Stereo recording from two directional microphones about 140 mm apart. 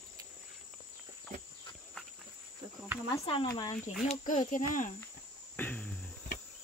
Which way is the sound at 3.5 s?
25° left (ahead or behind).